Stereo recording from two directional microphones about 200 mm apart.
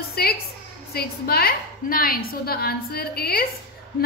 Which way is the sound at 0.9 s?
50° left (ahead or behind).